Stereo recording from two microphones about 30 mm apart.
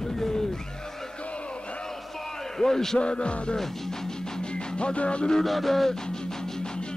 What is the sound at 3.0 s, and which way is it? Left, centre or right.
Music, left.